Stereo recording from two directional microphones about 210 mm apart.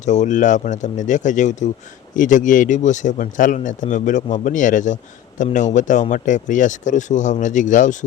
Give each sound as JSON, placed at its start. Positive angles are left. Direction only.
{"t": 0.0, "sound": "speech", "side_deg": 35}